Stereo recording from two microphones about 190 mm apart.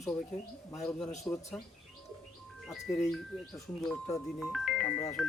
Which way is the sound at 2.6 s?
Centre (ahead or behind).